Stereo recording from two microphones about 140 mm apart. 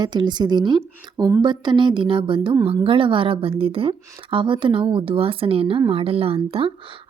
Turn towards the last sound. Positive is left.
turn(degrees=-40)  # may be behind; listen again after turning